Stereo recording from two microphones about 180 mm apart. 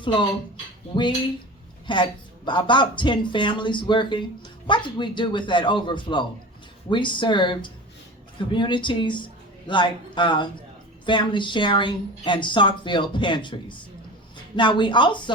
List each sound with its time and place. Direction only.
0.0 s speech: 25° left (ahead or behind)
1.9 s a woman's voice: 25° left (ahead or behind)